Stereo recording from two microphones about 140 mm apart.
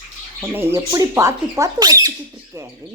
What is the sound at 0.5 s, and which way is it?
Speech, 25° right (ahead or behind).